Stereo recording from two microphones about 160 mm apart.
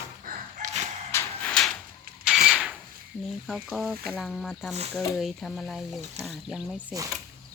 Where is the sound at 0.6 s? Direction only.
50° right (ahead or behind).